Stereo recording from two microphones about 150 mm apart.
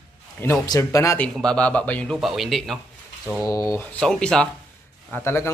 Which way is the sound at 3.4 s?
20° left (ahead or behind).